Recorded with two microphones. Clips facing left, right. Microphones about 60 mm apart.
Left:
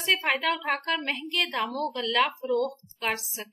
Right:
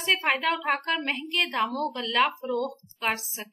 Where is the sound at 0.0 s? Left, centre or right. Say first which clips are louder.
Right 1 dB; centre.